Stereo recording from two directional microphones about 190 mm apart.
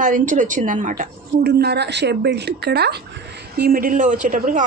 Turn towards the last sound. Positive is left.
turn(degrees=-45)  # may be behind; listen again after turning